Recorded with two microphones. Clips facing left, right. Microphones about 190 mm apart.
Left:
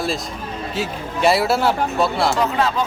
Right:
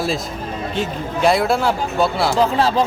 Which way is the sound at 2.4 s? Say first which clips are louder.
Right 3 dB; 30° right (ahead or behind).